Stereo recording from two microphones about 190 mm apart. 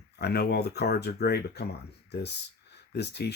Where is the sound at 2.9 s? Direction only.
65° left (ahead or behind).